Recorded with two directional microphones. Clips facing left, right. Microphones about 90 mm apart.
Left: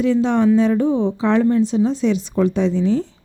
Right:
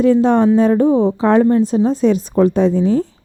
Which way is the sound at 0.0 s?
45° right (ahead or behind).